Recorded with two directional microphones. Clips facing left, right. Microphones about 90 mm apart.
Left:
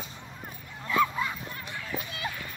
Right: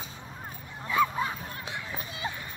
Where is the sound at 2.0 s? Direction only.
25° right (ahead or behind).